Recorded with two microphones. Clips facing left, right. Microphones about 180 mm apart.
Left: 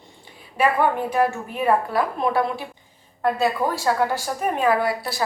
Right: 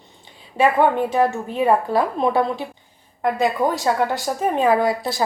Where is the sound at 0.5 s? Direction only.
25° right (ahead or behind).